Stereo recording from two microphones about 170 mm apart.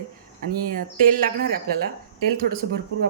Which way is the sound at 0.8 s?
55° right (ahead or behind).